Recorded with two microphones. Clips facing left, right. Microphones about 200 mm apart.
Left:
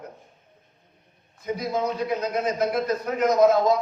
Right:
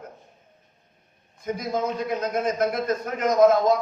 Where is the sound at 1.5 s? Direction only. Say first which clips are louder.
Left 1 dB; 50° right (ahead or behind).